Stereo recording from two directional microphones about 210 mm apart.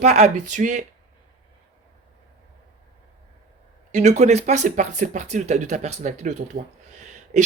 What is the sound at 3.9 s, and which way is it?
Speech, 30° right (ahead or behind).